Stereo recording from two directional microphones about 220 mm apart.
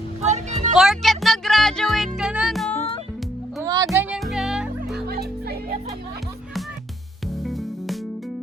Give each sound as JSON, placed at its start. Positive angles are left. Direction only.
{"t": 0.2, "sound": "music", "side_deg": -30}
{"t": 0.8, "sound": "music", "side_deg": 0}
{"t": 3.6, "sound": "music", "side_deg": -15}
{"t": 3.9, "sound": "music", "side_deg": -5}
{"t": 5.0, "sound": "music", "side_deg": -45}
{"t": 7.4, "sound": "music", "side_deg": 0}